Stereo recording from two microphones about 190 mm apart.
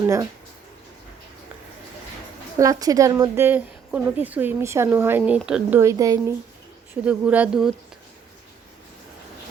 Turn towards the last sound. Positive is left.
turn(degrees=-5)  # may be behind; listen again after turning